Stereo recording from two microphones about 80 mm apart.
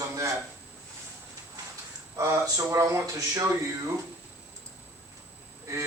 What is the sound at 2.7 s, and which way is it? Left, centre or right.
Speech, right.